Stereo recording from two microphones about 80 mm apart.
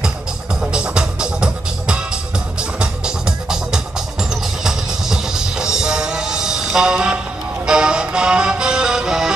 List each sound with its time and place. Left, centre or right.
0.6 s music: centre